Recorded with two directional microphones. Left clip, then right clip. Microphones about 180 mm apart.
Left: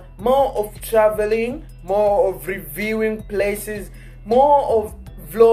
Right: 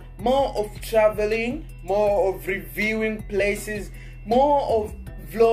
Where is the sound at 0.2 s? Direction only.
5° right (ahead or behind).